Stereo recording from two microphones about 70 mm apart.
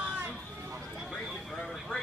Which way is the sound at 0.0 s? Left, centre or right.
Right.